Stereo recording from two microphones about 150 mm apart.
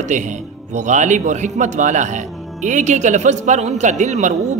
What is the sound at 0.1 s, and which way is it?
A man's voice, 55° right (ahead or behind).